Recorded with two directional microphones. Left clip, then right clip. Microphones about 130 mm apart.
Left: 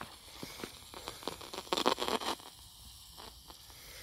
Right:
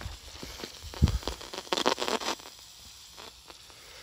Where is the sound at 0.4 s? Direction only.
35° right (ahead or behind).